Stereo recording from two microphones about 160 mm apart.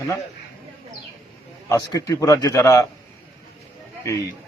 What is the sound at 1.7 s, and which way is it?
A man's voice, 25° left (ahead or behind).